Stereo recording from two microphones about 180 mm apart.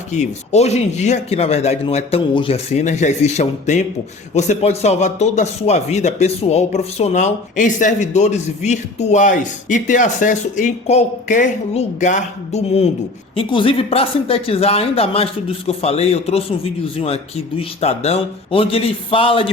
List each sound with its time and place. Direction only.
0.1 s speech: 40° left (ahead or behind)